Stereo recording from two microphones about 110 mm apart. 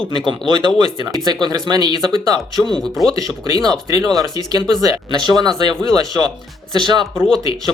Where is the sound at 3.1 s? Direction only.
35° right (ahead or behind).